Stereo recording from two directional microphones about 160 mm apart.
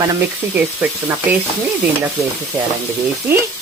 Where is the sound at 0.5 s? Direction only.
10° right (ahead or behind).